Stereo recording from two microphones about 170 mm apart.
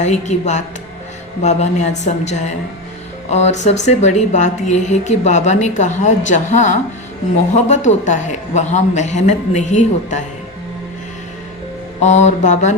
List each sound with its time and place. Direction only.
0.0 s speech: 45° left (ahead or behind)
12.0 s speech: 45° left (ahead or behind)